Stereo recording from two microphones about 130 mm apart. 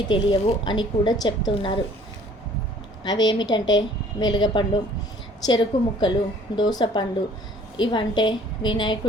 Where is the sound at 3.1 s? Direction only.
30° left (ahead or behind).